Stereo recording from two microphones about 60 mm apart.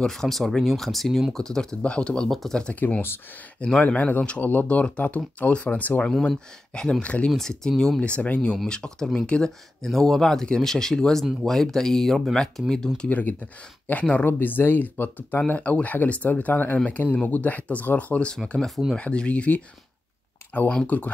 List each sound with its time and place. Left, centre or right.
0.0 s speech: centre
2.2 s speech: centre
2.7 s speech: left
3.5 s speech: centre
3.8 s speech: left
6.2 s speech: centre
7.2 s speech: centre
8.0 s speech: left
13.1 s speech: left
20.8 s speech: left